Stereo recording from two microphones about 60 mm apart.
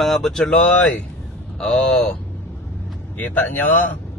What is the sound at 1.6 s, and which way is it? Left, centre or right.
Speech, centre.